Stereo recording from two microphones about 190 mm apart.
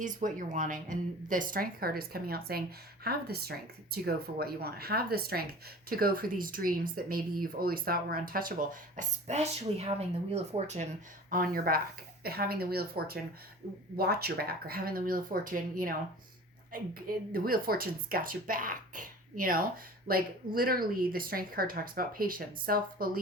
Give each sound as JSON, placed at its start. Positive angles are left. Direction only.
{"t": 0.0, "sound": "speech", "side_deg": -45}
{"t": 11.3, "sound": "speech", "side_deg": -50}